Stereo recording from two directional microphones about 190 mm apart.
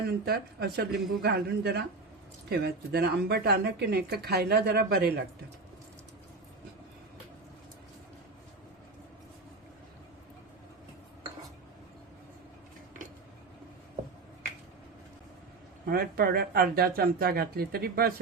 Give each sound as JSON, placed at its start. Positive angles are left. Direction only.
{"t": 0.3, "sound": "speech", "side_deg": -55}
{"t": 15.9, "sound": "speech", "side_deg": -55}